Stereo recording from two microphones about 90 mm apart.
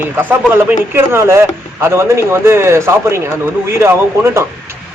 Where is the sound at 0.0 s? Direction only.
20° right (ahead or behind).